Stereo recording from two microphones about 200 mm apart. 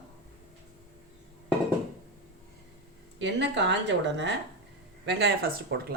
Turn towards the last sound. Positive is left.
turn(degrees=-55)  # may be behind; listen again after turning